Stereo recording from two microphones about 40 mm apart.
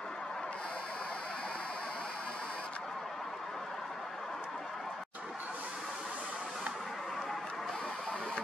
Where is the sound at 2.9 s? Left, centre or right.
Centre.